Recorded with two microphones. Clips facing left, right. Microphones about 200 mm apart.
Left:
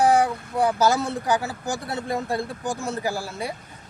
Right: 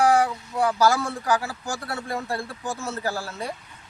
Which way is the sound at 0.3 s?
55° left (ahead or behind).